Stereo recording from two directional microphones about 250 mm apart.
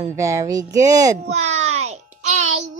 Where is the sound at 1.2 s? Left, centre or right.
Right.